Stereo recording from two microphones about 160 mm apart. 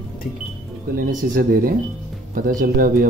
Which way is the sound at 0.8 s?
65° right (ahead or behind).